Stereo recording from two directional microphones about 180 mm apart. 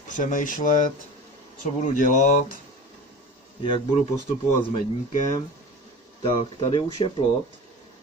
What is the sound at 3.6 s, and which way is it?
Speech, 30° left (ahead or behind).